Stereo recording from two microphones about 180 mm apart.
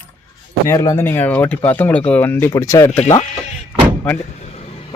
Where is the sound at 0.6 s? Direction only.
15° left (ahead or behind).